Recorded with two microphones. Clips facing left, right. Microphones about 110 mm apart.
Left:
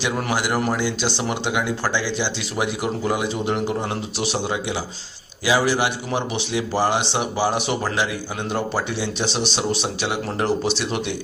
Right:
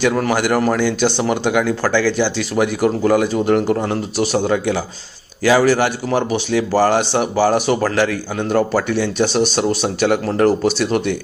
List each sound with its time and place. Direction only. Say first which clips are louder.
0.0 s speech: right 7 dB; 50° right (ahead or behind)
1.6 s speech: right 7 dB; 15° left (ahead or behind)
2.6 s speech: right 8 dB; 50° right (ahead or behind)